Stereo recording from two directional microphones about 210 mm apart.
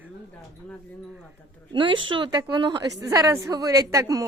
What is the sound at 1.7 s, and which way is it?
A woman's voice, 25° right (ahead or behind).